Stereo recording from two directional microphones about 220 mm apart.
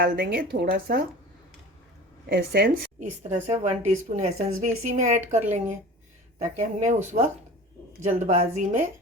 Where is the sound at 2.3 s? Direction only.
45° right (ahead or behind).